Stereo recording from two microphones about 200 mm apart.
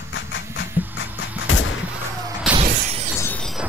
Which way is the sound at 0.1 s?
65° left (ahead or behind).